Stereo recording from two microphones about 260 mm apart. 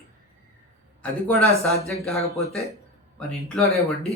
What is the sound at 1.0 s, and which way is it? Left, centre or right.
Speech, centre.